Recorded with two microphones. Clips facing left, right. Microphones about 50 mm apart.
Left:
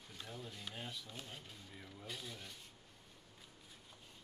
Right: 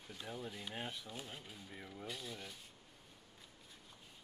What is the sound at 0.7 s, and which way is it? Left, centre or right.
Speech, right.